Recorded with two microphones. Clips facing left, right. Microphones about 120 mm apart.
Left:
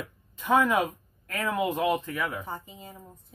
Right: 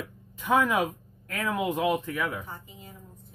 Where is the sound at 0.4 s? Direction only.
10° right (ahead or behind).